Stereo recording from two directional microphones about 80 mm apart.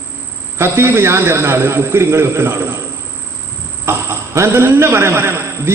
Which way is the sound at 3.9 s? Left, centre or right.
Right.